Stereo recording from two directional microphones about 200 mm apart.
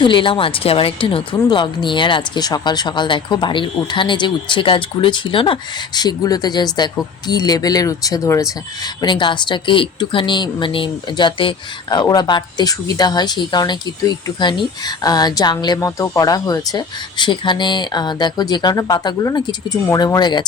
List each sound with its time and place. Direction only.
0.0 s speech: 25° left (ahead or behind)